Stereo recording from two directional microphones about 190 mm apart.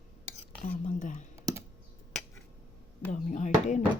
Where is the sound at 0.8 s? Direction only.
40° left (ahead or behind).